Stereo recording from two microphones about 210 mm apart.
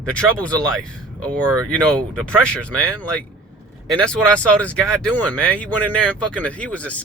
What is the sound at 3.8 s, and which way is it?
Speech, 5° left (ahead or behind).